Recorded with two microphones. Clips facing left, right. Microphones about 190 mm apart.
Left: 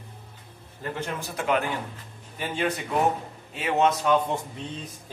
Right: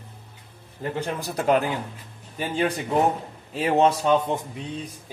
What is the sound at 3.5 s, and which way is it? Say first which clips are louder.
Speech: right 3 dB; 35° right (ahead or behind).